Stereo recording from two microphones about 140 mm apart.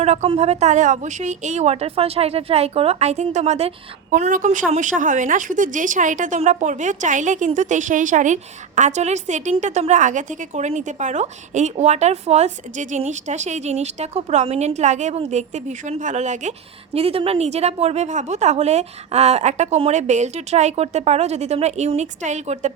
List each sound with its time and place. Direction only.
0.0 s a woman's voice: 50° right (ahead or behind)
4.1 s a woman's voice: 65° right (ahead or behind)